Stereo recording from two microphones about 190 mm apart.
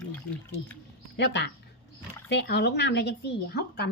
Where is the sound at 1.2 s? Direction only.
65° left (ahead or behind).